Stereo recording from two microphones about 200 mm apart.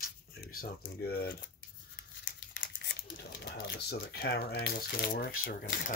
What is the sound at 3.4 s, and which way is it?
Speech, 55° left (ahead or behind).